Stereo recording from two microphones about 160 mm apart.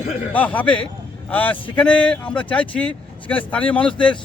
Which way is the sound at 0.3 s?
10° left (ahead or behind).